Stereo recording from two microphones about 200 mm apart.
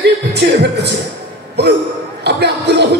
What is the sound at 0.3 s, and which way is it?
Speech, 55° right (ahead or behind).